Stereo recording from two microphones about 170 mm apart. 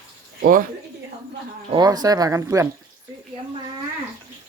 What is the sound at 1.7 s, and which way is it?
Speech, 25° right (ahead or behind).